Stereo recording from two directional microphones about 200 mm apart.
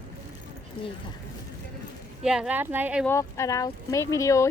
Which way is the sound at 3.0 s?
15° left (ahead or behind).